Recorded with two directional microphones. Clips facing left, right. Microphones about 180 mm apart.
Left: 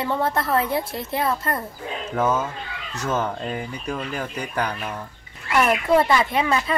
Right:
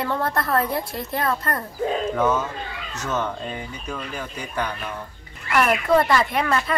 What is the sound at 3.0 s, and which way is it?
Speech, 40° left (ahead or behind).